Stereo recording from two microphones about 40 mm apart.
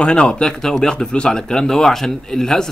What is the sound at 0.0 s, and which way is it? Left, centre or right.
Speech, left.